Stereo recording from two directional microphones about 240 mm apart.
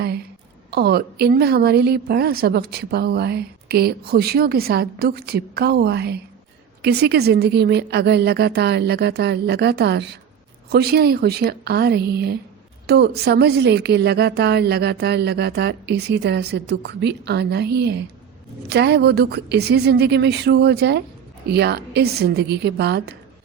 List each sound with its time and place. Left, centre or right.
0.7 s a woman's voice: right